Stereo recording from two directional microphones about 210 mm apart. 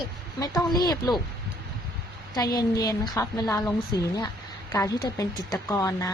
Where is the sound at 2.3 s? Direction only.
15° left (ahead or behind).